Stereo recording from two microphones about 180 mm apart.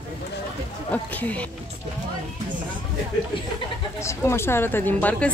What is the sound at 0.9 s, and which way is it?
Speech, 10° left (ahead or behind).